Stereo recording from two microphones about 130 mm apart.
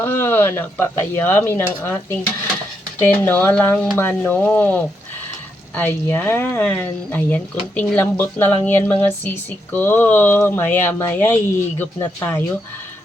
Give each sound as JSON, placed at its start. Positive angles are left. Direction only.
{"t": 0.0, "sound": "speech", "side_deg": 15}